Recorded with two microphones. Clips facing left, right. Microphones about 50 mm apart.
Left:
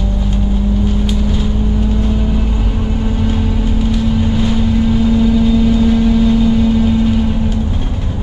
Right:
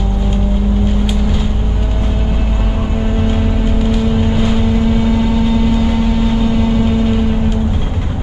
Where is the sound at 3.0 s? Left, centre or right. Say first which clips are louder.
Right 2 dB; right.